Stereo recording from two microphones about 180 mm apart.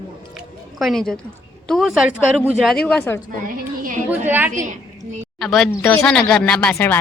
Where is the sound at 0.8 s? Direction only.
Centre (ahead or behind).